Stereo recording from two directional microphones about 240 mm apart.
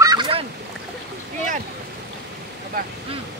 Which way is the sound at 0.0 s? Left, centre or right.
Centre.